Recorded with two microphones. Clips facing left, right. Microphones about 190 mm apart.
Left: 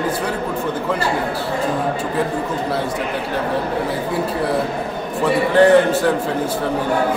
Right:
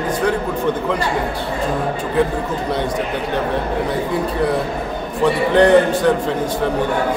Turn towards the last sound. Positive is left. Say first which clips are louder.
# even
turn(degrees=5)  # may be behind; listen again after turning